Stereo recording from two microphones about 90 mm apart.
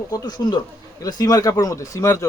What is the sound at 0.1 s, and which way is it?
Speech, 45° left (ahead or behind).